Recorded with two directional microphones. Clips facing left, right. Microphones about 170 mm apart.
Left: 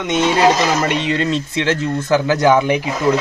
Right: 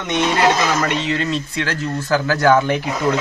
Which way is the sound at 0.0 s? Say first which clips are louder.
Left 3 dB; 20° left (ahead or behind).